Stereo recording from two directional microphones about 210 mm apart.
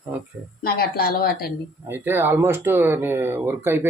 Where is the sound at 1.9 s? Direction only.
10° right (ahead or behind).